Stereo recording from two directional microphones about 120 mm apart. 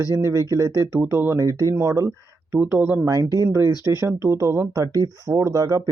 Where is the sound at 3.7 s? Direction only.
35° left (ahead or behind).